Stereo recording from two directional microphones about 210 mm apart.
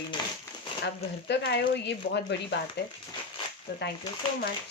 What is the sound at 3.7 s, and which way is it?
Speech, 50° left (ahead or behind).